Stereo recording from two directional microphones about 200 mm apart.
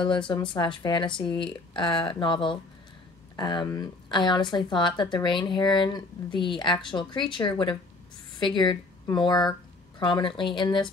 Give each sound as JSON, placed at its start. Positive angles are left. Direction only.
{"t": 0.0, "sound": "a woman's voice", "side_deg": 25}